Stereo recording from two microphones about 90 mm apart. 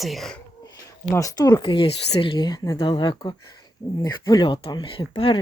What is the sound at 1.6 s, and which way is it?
Speech, 70° left (ahead or behind).